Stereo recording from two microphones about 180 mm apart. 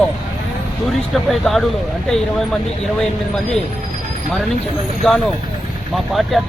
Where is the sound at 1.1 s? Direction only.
Centre (ahead or behind).